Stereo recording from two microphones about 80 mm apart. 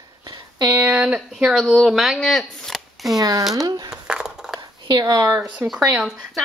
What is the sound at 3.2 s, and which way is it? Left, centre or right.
Speech, right.